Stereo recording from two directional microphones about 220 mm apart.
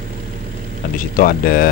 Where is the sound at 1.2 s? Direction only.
40° left (ahead or behind).